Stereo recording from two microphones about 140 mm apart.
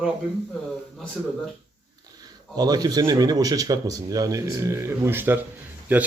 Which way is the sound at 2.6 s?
30° right (ahead or behind).